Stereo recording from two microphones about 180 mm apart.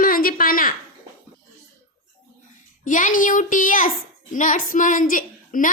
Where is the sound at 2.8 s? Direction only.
45° left (ahead or behind).